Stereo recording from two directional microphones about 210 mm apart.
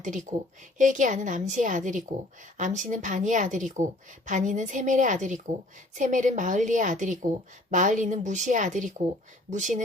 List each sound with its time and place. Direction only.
0.0 s speech: 35° right (ahead or behind)